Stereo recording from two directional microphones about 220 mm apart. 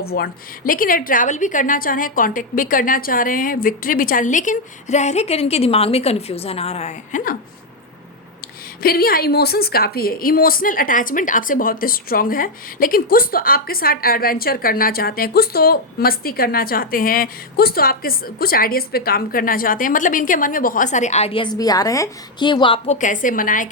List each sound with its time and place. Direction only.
0.0 s a woman's voice: 45° left (ahead or behind)
8.8 s a woman's voice: 40° left (ahead or behind)